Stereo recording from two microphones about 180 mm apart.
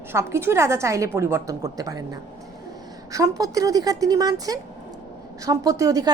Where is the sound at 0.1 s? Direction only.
15° right (ahead or behind).